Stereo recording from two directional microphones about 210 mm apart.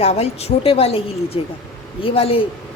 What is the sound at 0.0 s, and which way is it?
A woman's voice, 30° left (ahead or behind).